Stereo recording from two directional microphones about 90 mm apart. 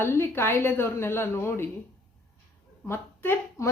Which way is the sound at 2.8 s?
25° left (ahead or behind).